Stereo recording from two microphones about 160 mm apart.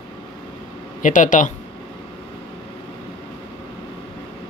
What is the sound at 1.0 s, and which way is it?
Speech, 55° left (ahead or behind).